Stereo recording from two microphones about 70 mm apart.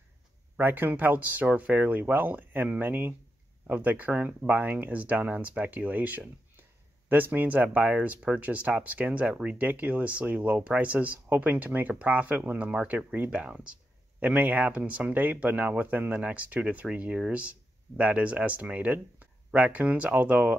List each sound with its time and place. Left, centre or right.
0.6 s speech: right